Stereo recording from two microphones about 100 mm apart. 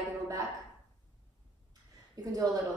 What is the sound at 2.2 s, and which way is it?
Speech, 35° right (ahead or behind).